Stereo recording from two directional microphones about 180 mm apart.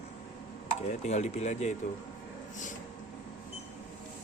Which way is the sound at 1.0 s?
40° left (ahead or behind).